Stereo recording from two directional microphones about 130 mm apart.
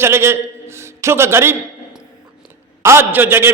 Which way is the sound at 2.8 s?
20° right (ahead or behind).